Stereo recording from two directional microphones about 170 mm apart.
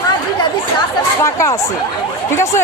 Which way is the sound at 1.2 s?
15° left (ahead or behind).